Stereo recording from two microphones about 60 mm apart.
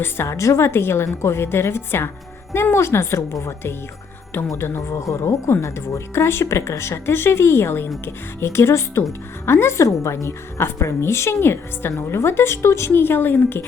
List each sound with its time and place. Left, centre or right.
0.0 s a woman's voice: left
12.9 s a woman's voice: left